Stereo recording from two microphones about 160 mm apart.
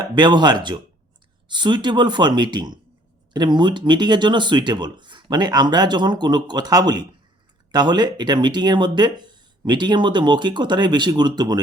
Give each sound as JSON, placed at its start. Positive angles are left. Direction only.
{"t": 0.0, "sound": "speech", "side_deg": -30}